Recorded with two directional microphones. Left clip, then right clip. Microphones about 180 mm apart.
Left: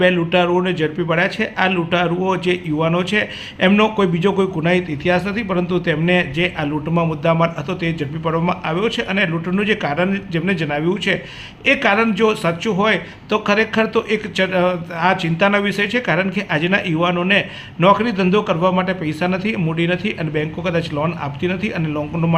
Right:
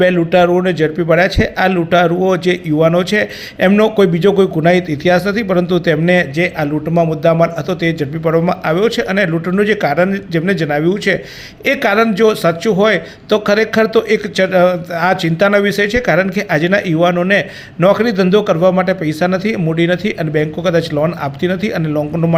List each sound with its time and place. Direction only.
0.0 s a man's voice: 20° right (ahead or behind)